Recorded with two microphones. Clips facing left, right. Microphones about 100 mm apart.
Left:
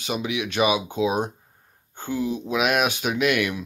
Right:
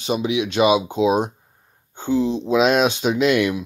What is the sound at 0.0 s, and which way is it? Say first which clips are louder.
Speech: right 6 dB; 25° right (ahead or behind).